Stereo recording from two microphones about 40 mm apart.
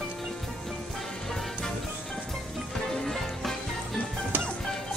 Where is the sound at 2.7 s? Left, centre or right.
Centre.